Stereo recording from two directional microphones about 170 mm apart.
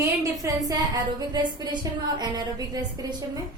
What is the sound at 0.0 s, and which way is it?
A woman's voice, 20° right (ahead or behind).